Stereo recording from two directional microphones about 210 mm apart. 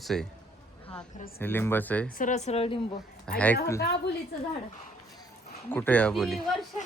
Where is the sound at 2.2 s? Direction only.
35° left (ahead or behind).